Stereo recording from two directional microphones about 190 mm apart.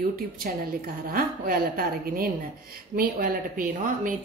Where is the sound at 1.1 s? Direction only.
50° right (ahead or behind).